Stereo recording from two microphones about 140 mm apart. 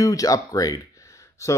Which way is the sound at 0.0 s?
25° left (ahead or behind).